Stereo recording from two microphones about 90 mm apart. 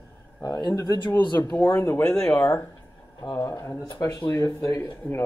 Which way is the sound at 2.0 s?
10° left (ahead or behind).